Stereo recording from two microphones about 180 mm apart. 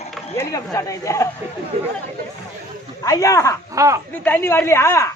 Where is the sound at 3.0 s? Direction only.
20° left (ahead or behind).